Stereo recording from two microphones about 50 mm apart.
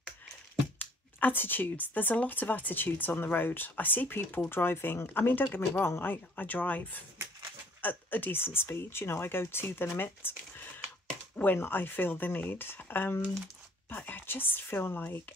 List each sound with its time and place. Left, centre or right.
0.7 s speech: left
6.3 s speech: left